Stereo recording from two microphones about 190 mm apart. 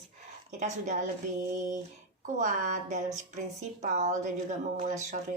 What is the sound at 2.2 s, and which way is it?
Speech, 45° right (ahead or behind).